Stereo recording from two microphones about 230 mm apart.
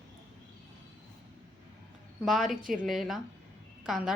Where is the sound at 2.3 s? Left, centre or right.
Centre.